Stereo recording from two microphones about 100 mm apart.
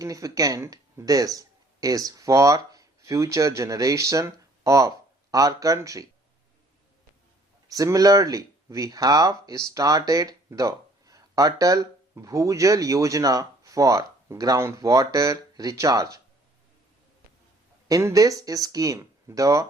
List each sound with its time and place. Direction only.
0.0 s speech: 35° right (ahead or behind)
7.7 s speech: 35° right (ahead or behind)
17.8 s speech: 35° right (ahead or behind)